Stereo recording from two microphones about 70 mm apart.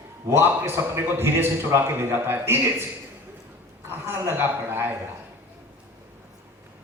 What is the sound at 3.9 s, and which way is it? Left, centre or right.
A man's voice, right.